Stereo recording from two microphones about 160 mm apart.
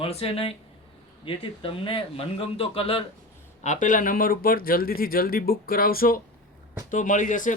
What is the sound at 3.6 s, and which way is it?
Speech, 50° left (ahead or behind).